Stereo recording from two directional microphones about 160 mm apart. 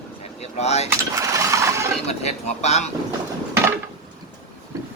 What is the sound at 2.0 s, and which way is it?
Speech, 45° left (ahead or behind).